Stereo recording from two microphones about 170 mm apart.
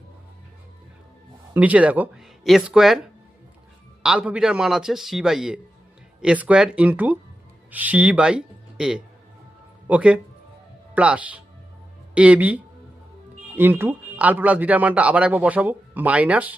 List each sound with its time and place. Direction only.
1.5 s speech: 10° right (ahead or behind)
4.0 s speech: 5° right (ahead or behind)